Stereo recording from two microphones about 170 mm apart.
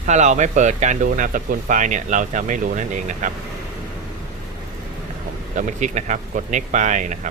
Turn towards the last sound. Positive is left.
turn(degrees=-45)  # may be behind; listen again after turning